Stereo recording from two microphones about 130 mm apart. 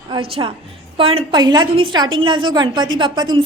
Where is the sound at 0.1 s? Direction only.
40° right (ahead or behind).